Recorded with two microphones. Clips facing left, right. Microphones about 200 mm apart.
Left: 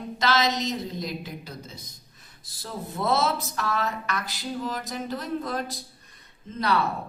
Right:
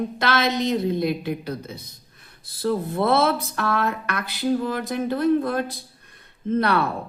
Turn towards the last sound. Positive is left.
turn(degrees=-55)  # may be behind; listen again after turning